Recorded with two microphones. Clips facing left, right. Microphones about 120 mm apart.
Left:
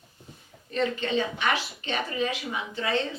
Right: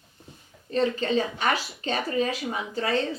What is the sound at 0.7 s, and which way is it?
Speech, 35° right (ahead or behind).